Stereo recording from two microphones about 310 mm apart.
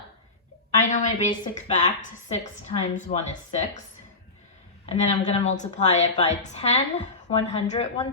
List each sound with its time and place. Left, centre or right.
0.8 s a woman's voice: left
4.9 s a woman's voice: centre